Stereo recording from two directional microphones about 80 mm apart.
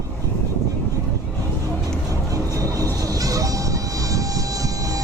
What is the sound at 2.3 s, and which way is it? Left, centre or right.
Music, right.